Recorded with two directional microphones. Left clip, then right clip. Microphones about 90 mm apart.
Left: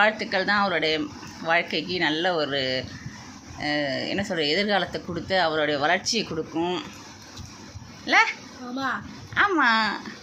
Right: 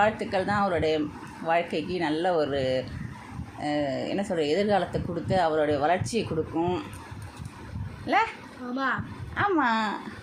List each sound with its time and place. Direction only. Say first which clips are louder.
0.0 s speech: left 3 dB; 30° right (ahead or behind)
8.0 s a child's voice: left 5 dB; 30° right (ahead or behind)
9.3 s speech: left 4 dB; 30° right (ahead or behind)